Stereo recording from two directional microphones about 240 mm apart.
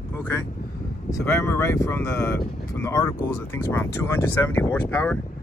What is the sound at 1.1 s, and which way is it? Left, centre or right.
Speech, centre.